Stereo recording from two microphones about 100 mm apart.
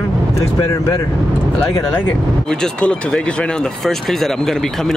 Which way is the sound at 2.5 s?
10° left (ahead or behind).